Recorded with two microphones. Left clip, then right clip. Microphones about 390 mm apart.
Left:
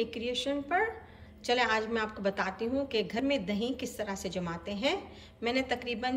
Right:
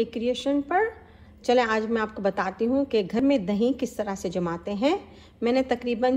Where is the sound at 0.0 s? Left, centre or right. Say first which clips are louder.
Right 7 dB; centre.